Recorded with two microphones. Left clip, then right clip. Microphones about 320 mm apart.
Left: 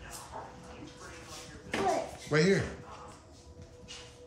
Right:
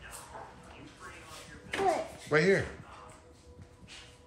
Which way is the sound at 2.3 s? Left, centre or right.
Centre.